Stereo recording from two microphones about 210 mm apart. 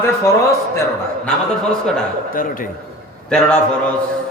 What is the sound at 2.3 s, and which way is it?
Speech, 40° left (ahead or behind).